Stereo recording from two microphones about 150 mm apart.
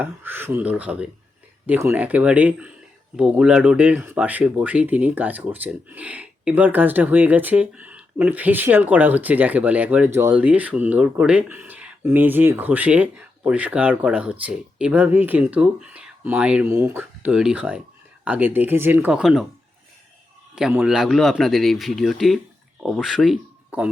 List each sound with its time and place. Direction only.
0.0 s speech: 15° right (ahead or behind)
20.6 s a man's voice: 5° right (ahead or behind)